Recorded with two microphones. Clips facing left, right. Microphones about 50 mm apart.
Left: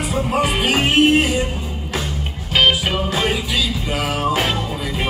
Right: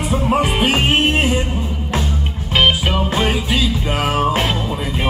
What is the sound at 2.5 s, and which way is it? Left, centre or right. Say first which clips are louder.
Music: right 1 dB; centre.